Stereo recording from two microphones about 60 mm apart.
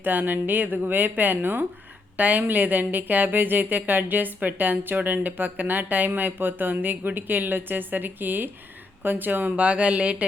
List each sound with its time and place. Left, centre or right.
0.0 s speech: right